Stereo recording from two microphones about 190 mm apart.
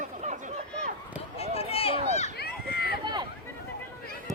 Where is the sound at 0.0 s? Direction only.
40° right (ahead or behind).